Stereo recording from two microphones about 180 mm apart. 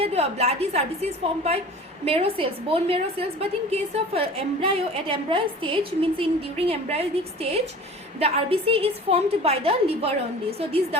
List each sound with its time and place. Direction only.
0.0 s a woman's voice: 35° right (ahead or behind)